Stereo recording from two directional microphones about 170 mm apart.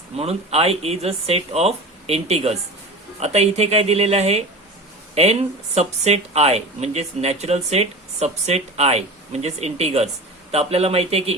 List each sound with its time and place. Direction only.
0.2 s speech: 35° right (ahead or behind)